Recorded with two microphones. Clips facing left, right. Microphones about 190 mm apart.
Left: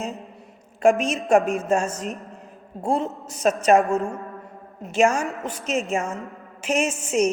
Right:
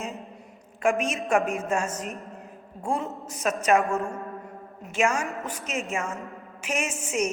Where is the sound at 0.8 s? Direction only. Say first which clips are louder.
Left 6 dB; 35° left (ahead or behind).